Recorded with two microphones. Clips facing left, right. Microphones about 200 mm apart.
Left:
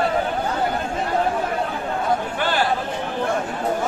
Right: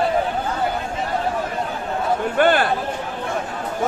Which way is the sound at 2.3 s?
55° right (ahead or behind).